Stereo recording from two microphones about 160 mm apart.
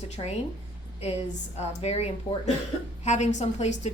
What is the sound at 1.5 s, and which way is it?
A woman's voice, 40° left (ahead or behind).